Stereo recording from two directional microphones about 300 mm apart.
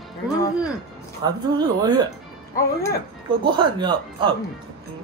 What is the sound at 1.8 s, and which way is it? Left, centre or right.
Speech, centre.